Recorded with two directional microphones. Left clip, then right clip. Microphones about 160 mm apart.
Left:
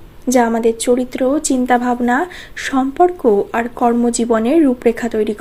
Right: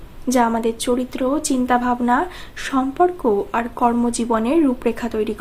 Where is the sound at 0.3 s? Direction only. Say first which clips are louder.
Left 4 dB; 25° left (ahead or behind).